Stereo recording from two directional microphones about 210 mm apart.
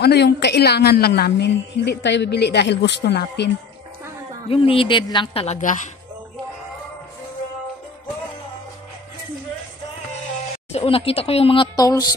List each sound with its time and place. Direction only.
0.0 s a woman's voice: 50° left (ahead or behind)
4.5 s a woman's voice: 25° left (ahead or behind)
10.7 s a woman's voice: 25° left (ahead or behind)